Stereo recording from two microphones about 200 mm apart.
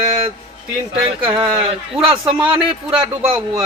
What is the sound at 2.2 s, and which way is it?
Speech, 5° right (ahead or behind).